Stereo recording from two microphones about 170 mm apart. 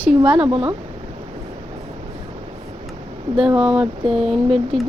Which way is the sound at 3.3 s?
5° right (ahead or behind).